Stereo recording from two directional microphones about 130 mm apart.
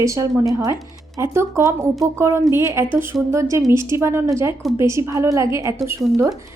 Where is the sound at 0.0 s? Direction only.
25° right (ahead or behind).